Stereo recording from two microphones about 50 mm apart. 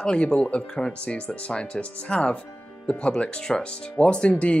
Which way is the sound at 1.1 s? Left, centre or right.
Left.